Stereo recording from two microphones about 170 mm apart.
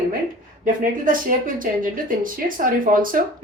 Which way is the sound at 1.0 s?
55° right (ahead or behind).